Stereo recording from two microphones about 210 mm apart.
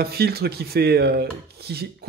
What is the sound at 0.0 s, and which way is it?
A man's voice, 50° right (ahead or behind).